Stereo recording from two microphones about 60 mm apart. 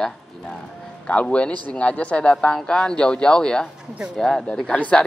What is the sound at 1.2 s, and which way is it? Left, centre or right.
A man's voice, centre.